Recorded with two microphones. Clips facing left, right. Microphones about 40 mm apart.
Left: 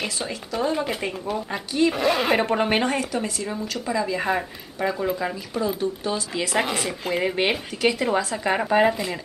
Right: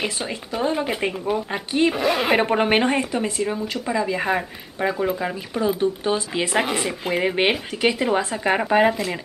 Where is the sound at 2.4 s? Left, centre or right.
Right.